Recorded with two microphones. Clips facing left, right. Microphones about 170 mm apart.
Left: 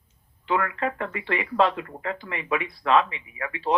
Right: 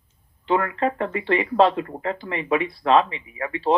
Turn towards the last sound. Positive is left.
turn(degrees=-30)  # may be behind; listen again after turning